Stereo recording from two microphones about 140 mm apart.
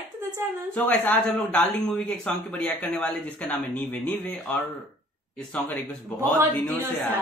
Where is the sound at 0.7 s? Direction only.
10° left (ahead or behind).